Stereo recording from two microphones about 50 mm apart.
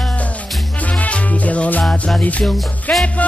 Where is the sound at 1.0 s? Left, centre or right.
Left.